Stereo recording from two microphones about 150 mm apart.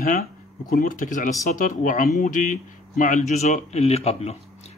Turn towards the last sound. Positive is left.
turn(degrees=45)  # may be behind; listen again after turning